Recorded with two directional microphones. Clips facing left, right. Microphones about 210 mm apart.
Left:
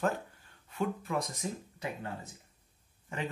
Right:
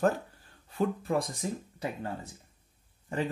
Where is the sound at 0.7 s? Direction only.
35° right (ahead or behind).